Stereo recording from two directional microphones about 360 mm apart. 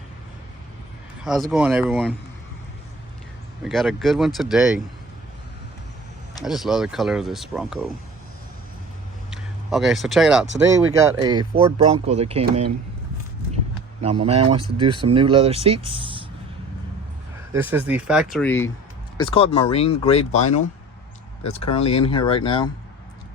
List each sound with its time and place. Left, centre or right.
1.2 s speech: centre
3.6 s speech: centre
6.4 s speech: centre
9.3 s speech: centre
14.0 s speech: centre
17.5 s speech: centre